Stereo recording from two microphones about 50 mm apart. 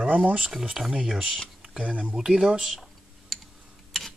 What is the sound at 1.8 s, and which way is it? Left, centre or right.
Speech, right.